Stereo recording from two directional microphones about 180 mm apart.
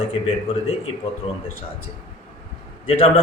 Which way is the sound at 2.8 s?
30° left (ahead or behind).